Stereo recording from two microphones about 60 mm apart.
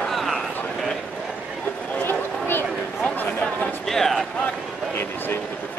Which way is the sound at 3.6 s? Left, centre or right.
Centre.